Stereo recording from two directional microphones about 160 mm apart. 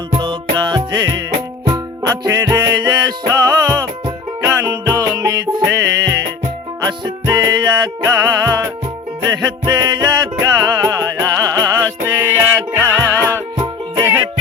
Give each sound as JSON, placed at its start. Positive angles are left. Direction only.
{"t": 0.2, "sound": "music", "side_deg": -30}